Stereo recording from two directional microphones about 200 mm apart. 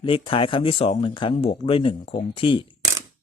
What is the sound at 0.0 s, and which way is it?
Speech, 25° left (ahead or behind).